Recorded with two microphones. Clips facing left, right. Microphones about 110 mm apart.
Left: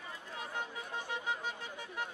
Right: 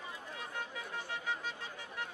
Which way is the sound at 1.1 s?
20° left (ahead or behind).